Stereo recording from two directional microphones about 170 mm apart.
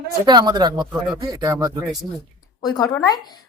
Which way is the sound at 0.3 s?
25° right (ahead or behind).